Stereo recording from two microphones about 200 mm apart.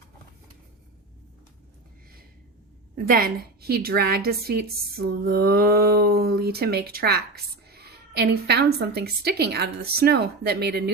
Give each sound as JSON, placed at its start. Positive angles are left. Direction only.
{"t": 3.1, "sound": "a woman's voice", "side_deg": -50}